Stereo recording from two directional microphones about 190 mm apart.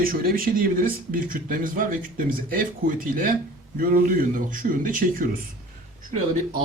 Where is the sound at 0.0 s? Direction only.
50° right (ahead or behind).